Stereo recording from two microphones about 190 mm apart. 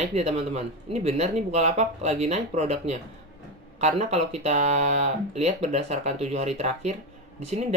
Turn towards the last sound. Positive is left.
turn(degrees=-35)  # may be behind; listen again after turning